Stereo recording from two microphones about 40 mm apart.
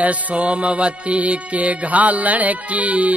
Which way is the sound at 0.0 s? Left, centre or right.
Right.